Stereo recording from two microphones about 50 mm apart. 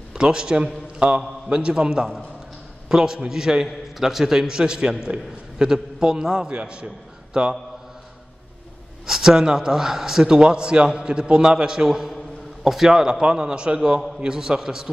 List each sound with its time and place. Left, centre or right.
0.1 s a man's voice: centre
9.0 s a man's voice: centre